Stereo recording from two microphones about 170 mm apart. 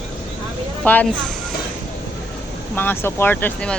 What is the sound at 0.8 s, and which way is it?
Speech, 10° left (ahead or behind).